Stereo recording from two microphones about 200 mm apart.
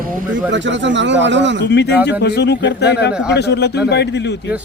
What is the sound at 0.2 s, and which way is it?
Speech, 40° right (ahead or behind).